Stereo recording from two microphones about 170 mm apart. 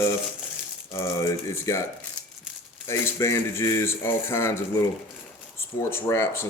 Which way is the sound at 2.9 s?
15° left (ahead or behind).